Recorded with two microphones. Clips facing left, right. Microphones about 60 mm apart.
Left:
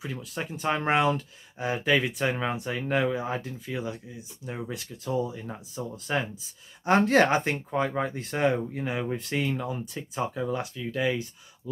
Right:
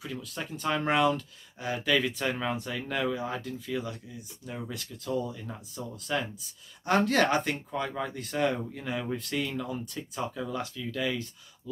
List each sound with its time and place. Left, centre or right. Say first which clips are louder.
0.2 s speech: left 3 dB; centre